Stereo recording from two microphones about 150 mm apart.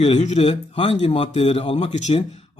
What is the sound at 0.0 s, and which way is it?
A man's voice, 45° left (ahead or behind).